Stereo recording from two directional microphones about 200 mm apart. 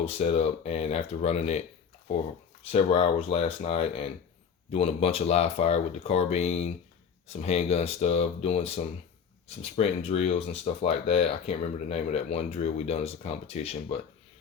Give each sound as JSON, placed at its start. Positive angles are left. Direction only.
{"t": 0.0, "sound": "speech", "side_deg": 30}
{"t": 2.7, "sound": "speech", "side_deg": 30}